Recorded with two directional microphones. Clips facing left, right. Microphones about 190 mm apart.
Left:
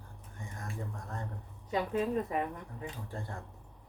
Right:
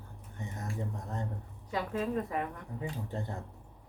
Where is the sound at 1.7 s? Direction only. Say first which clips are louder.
Left 2 dB; 20° left (ahead or behind).